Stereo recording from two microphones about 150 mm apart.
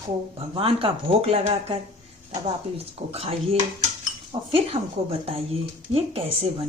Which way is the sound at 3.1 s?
40° right (ahead or behind).